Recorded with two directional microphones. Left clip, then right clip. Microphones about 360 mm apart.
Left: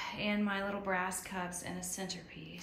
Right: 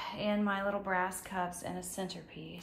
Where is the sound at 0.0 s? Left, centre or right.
Centre.